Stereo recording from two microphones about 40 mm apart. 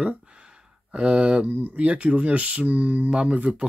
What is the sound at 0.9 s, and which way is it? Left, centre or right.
Speech, right.